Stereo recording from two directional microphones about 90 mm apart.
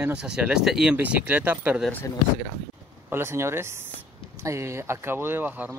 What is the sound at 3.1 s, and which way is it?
Speech, 30° right (ahead or behind).